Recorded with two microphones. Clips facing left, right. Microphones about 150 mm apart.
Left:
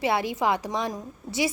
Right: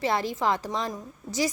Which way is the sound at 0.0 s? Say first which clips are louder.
Left 1 dB; 10° left (ahead or behind).